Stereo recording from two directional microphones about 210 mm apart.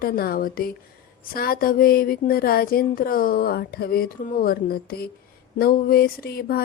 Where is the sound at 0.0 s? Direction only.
45° left (ahead or behind).